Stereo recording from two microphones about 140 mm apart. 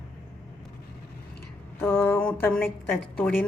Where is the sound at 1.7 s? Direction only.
15° left (ahead or behind).